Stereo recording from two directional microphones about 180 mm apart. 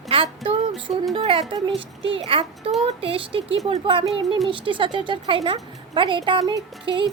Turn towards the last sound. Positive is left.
turn(degrees=-25)  # may be behind; listen again after turning